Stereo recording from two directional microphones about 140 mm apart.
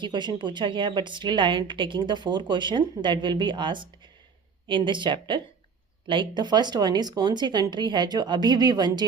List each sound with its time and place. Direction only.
0.0 s a woman's voice: 35° right (ahead or behind)